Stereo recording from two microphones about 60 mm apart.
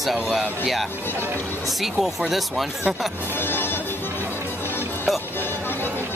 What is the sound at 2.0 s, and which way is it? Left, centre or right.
Speech, centre.